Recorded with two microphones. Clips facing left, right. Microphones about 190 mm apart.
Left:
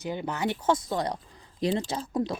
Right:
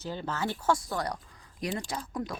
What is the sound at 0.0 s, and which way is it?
Speech, 15° left (ahead or behind).